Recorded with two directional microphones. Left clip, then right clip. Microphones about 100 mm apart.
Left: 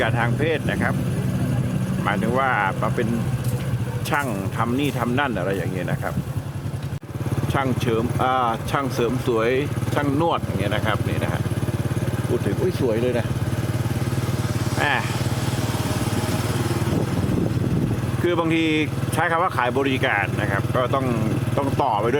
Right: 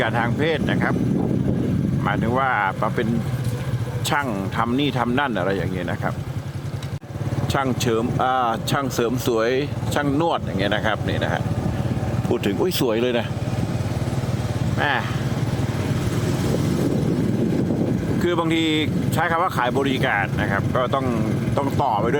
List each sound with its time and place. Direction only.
0.0 s speech: 35° right (ahead or behind)
2.0 s speech: 40° right (ahead or behind)
4.1 s speech: 40° right (ahead or behind)
7.5 s speech: 55° right (ahead or behind)
14.8 s speech: 35° right (ahead or behind)
18.3 s speech: 40° right (ahead or behind)